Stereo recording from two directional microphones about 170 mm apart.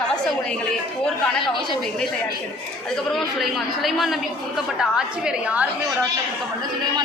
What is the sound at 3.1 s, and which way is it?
A woman's voice, centre (ahead or behind).